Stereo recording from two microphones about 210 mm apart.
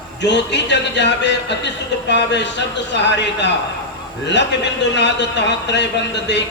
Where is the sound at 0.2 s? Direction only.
55° left (ahead or behind).